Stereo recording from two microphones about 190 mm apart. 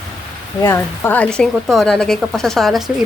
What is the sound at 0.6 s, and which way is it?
A woman's voice, 15° left (ahead or behind).